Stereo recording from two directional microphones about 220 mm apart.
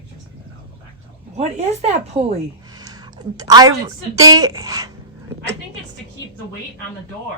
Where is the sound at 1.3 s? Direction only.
30° right (ahead or behind).